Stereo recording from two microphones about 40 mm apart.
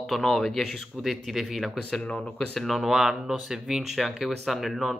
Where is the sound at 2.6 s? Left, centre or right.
Centre.